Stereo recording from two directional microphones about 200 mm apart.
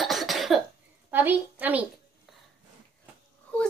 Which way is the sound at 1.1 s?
10° right (ahead or behind).